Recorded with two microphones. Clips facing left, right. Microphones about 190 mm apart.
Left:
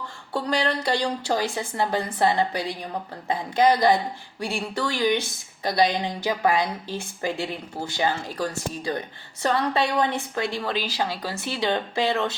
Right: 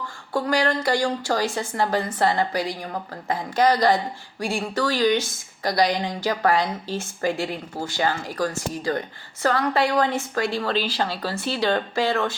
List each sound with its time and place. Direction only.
0.4 s a woman's voice: 20° left (ahead or behind)